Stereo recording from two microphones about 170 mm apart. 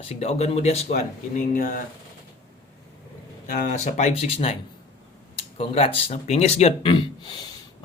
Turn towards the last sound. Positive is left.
turn(degrees=25)  # may be behind; listen again after turning